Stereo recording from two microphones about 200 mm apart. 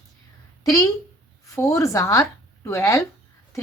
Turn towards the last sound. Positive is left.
turn(degrees=15)  # may be behind; listen again after turning